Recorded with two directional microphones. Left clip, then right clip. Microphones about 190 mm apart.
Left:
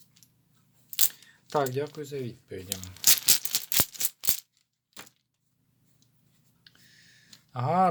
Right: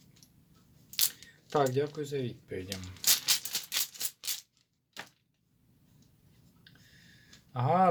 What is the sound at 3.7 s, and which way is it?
Rattle, 65° left (ahead or behind).